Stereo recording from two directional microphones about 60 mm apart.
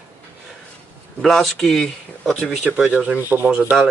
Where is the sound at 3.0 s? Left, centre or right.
Centre.